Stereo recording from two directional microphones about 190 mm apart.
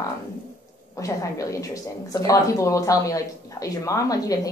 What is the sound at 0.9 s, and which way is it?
Speech, 15° left (ahead or behind).